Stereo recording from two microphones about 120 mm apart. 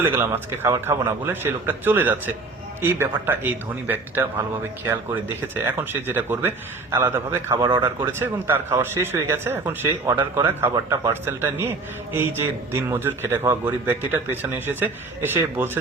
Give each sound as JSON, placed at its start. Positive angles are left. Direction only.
{"t": 0.0, "sound": "a man's voice", "side_deg": -20}
{"t": 5.6, "sound": "a man's voice", "side_deg": -20}
{"t": 7.6, "sound": "speech", "side_deg": -40}
{"t": 8.0, "sound": "a man's voice", "side_deg": -20}